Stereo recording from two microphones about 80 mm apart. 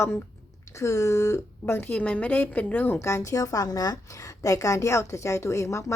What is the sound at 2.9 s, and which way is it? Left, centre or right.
A woman's voice, left.